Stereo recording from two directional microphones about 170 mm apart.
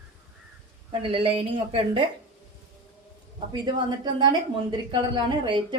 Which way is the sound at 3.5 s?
25° right (ahead or behind).